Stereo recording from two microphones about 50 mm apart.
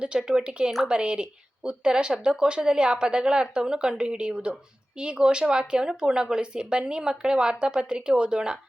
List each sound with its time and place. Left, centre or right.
0.0 s speech: centre